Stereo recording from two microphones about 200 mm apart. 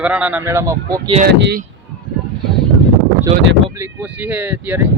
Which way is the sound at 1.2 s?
55° right (ahead or behind).